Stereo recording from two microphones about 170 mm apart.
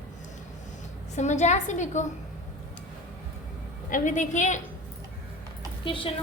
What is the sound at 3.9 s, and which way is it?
Speech, 50° left (ahead or behind).